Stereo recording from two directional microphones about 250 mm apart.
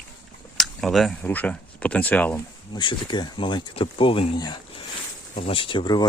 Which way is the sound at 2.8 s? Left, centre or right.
Centre.